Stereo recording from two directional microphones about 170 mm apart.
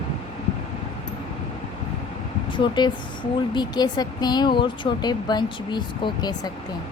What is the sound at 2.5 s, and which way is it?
Speech, 25° left (ahead or behind).